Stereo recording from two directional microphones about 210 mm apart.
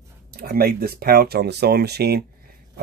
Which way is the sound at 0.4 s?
45° right (ahead or behind).